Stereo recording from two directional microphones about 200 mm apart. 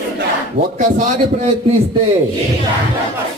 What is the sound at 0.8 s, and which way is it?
A man's voice, 40° right (ahead or behind).